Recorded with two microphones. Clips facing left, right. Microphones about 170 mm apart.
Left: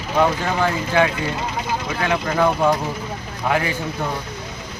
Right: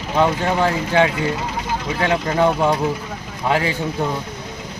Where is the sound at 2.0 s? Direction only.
30° right (ahead or behind).